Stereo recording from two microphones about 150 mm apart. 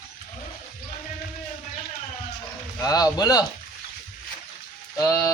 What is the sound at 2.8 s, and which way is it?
Speech, 25° left (ahead or behind).